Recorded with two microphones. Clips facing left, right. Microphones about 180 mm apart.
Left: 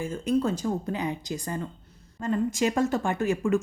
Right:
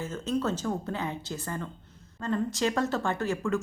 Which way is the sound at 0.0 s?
10° left (ahead or behind).